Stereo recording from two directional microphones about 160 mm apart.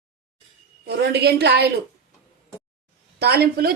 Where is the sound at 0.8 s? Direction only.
90° right.